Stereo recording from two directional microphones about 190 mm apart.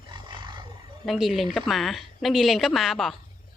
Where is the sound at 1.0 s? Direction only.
Centre (ahead or behind).